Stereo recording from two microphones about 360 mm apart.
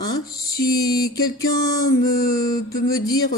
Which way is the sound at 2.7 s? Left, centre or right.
Left.